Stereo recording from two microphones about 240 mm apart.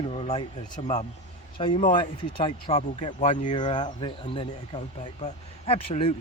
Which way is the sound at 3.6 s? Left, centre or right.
Centre.